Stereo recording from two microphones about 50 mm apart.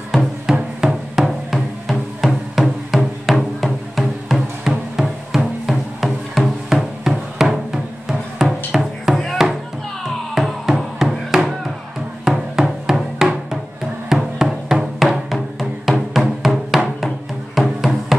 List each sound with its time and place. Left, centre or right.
0.1 s music: centre
10.3 s music: centre